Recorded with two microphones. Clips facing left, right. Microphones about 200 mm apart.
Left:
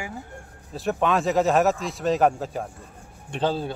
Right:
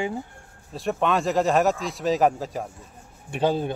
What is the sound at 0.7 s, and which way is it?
Speech, centre (ahead or behind).